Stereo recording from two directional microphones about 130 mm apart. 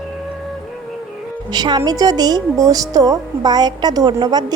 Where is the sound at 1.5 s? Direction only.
35° right (ahead or behind).